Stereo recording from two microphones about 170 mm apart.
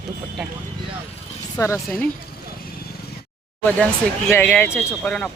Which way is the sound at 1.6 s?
15° left (ahead or behind).